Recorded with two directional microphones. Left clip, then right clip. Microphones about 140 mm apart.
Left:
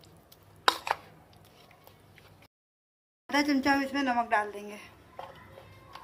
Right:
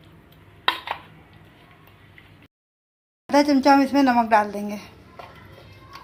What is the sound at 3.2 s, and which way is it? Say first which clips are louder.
Speech: right 10 dB; 25° right (ahead or behind).